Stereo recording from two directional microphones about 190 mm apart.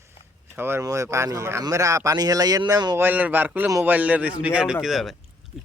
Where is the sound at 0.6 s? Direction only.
10° right (ahead or behind).